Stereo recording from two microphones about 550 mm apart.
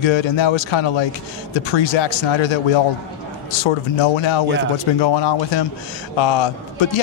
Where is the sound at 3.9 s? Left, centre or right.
Left.